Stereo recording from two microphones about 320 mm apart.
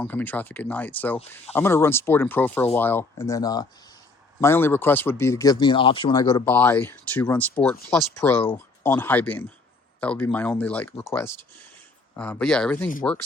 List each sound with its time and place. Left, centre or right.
0.0 s speech: centre